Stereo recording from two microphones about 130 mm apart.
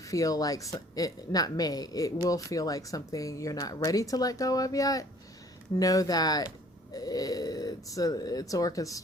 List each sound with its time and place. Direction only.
0.0 s speech: 25° left (ahead or behind)